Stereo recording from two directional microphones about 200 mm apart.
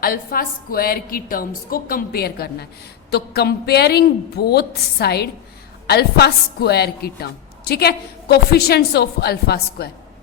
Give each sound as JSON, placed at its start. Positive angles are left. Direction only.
{"t": 0.0, "sound": "a woman's voice", "side_deg": 45}